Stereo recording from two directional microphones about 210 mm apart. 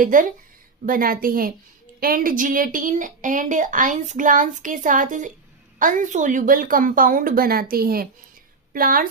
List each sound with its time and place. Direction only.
0.0 s a woman's voice: 40° right (ahead or behind)